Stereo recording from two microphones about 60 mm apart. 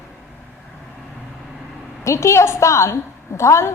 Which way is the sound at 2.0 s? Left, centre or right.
Left.